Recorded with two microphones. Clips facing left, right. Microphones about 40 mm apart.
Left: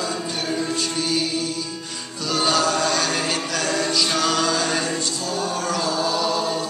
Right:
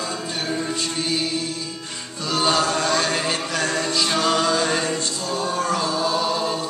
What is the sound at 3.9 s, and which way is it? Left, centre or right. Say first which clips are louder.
Music: right 3 dB; centre.